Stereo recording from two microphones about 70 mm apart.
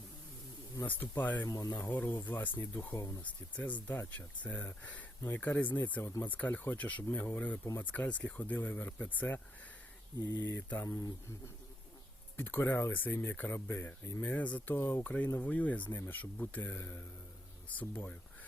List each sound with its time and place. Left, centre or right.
0.9 s speech: left
1.5 s speech: left
1.7 s speech: left
2.9 s speech: left
3.2 s speech: left
10.2 s speech: left
12.4 s speech: left
14.8 s speech: left
15.0 s speech: left